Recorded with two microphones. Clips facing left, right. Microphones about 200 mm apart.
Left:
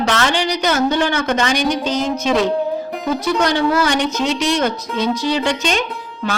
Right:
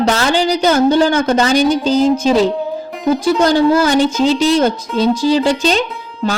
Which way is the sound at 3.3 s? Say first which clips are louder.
Right 5 dB; 30° right (ahead or behind).